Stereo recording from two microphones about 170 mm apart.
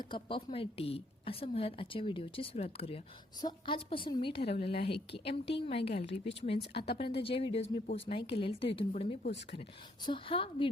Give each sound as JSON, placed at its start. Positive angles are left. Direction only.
{"t": 0.0, "sound": "a woman's voice", "side_deg": 30}
{"t": 6.7, "sound": "speech", "side_deg": 75}
{"t": 7.2, "sound": "a woman's voice", "side_deg": 30}
{"t": 9.2, "sound": "speech", "side_deg": 85}
{"t": 10.0, "sound": "a woman's voice", "side_deg": 30}